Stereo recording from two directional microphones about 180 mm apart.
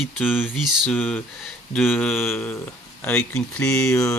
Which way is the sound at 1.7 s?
10° left (ahead or behind).